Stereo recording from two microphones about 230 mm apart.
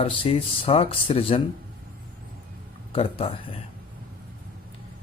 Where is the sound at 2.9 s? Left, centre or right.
Left.